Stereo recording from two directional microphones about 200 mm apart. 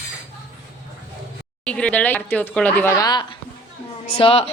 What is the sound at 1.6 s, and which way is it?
Speech, 5° left (ahead or behind).